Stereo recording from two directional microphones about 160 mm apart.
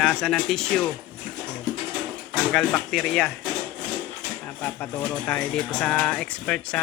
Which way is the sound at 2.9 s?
Centre (ahead or behind).